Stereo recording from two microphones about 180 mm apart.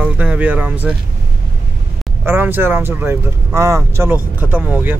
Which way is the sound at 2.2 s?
10° right (ahead or behind).